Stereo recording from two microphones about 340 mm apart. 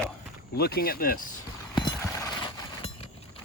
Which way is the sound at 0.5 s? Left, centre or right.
Left.